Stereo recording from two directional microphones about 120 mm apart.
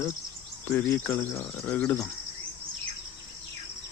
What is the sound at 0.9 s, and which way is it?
Speech, 25° left (ahead or behind).